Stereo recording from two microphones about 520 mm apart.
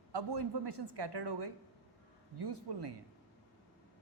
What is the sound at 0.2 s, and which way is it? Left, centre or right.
Speech, right.